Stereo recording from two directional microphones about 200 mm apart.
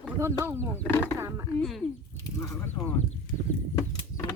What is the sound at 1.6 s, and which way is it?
Speech, centre (ahead or behind).